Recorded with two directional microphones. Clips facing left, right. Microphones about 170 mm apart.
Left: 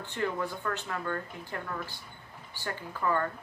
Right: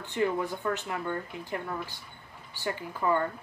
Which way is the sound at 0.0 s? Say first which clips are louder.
Right 4 dB; 15° right (ahead or behind).